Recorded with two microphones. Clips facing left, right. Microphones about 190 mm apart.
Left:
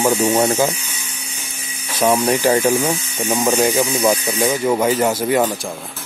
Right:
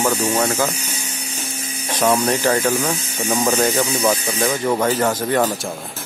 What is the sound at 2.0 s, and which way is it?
A man's voice, 10° left (ahead or behind).